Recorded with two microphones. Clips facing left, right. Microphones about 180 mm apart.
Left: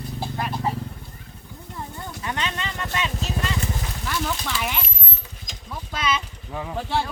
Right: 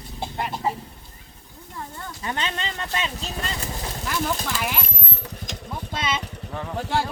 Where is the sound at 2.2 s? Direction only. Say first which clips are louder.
Even; 30° right (ahead or behind).